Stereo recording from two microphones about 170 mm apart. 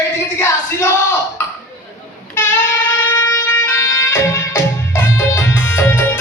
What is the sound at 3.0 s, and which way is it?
Music, 15° left (ahead or behind).